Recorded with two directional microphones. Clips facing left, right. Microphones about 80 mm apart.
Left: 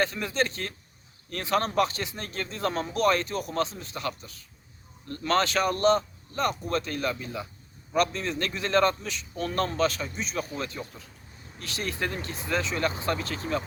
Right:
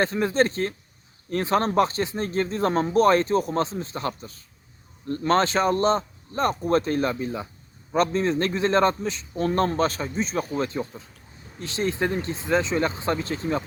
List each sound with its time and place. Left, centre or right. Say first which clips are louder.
0.0 s a man's voice: right 6 dB; right